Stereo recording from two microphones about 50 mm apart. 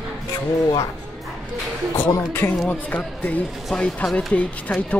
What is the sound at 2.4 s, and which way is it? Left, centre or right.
Speech, left.